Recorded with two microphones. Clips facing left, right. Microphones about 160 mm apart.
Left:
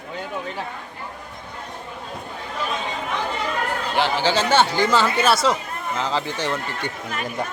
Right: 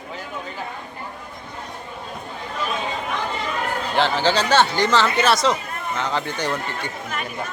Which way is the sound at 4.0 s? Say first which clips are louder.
Right 1 dB; 10° left (ahead or behind).